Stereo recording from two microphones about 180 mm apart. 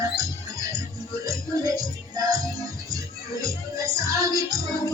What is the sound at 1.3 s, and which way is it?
Music, 20° right (ahead or behind).